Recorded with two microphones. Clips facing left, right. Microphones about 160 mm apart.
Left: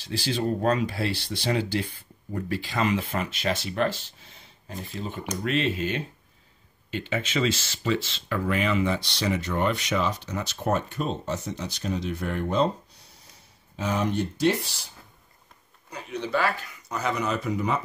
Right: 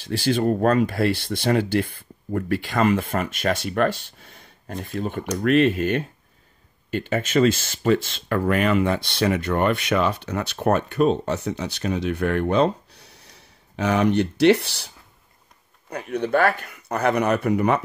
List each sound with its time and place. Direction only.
0.0 s speech: 50° right (ahead or behind); by 14.9 s 70° right (ahead or behind)
15.9 s speech: 60° right (ahead or behind)